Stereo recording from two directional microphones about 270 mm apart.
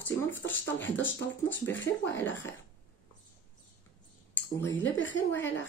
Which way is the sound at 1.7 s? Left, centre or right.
Left.